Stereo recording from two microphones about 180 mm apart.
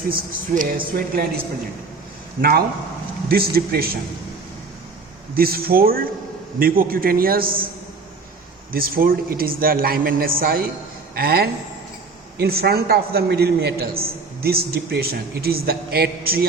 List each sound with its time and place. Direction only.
0.1 s a man's voice: 50° right (ahead or behind)
2.4 s a man's voice: 60° right (ahead or behind)
5.3 s a man's voice: 55° right (ahead or behind)
8.7 s a man's voice: 55° right (ahead or behind)